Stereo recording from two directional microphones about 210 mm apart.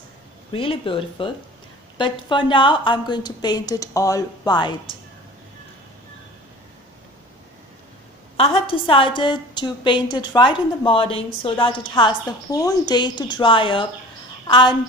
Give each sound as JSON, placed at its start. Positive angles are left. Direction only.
{"t": 0.5, "sound": "a woman's voice", "side_deg": 25}
{"t": 8.4, "sound": "a woman's voice", "side_deg": 25}